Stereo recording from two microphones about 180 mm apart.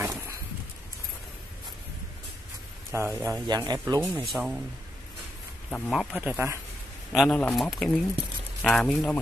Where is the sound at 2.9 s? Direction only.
15° right (ahead or behind).